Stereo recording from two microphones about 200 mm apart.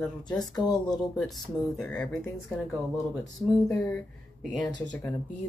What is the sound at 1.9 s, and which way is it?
Speech, 5° left (ahead or behind).